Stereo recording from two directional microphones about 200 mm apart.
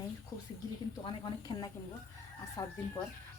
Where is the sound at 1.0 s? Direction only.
20° left (ahead or behind).